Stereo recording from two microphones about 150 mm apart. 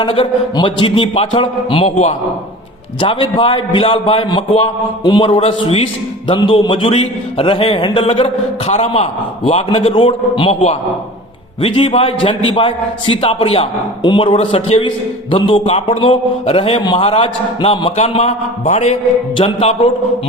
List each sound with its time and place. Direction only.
0.0 s a man's voice: 35° left (ahead or behind)